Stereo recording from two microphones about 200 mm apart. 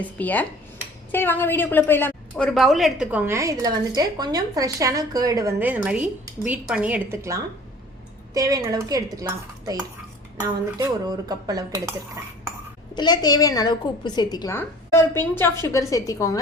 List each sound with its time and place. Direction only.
0.0 s a woman's voice: 10° left (ahead or behind); by 11.6 s 20° right (ahead or behind)
12.9 s a woman's voice: 20° left (ahead or behind)